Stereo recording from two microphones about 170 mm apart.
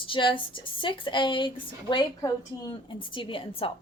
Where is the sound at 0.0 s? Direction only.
30° left (ahead or behind).